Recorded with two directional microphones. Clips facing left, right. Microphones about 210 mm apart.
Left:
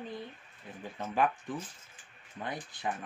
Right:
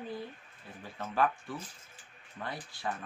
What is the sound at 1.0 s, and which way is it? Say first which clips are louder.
Speech: even; 15° left (ahead or behind).